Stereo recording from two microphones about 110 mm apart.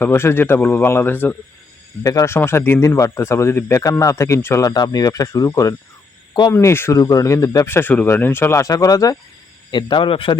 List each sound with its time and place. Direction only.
0.0 s speech: 20° left (ahead or behind)
2.0 s speech: 30° left (ahead or behind)
7.7 s speech: 20° left (ahead or behind)
9.7 s a man's voice: 50° left (ahead or behind)